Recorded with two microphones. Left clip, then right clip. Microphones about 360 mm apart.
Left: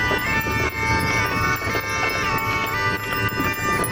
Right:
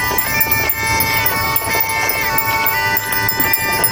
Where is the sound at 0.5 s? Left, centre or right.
Centre.